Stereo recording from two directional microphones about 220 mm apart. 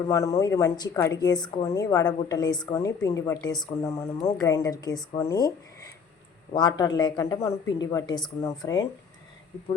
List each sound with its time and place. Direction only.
0.1 s a woman's voice: 15° left (ahead or behind)